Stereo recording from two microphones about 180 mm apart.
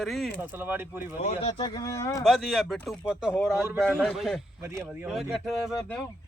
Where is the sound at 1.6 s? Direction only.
20° left (ahead or behind).